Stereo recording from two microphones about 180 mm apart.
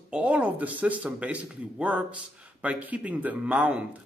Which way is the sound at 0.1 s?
5° right (ahead or behind).